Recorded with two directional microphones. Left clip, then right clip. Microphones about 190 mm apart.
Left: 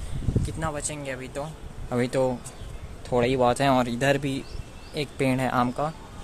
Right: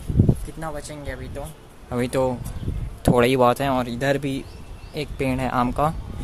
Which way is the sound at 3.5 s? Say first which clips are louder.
Left 1 dB; centre (ahead or behind).